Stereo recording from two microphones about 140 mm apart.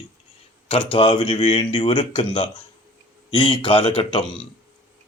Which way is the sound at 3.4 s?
40° left (ahead or behind).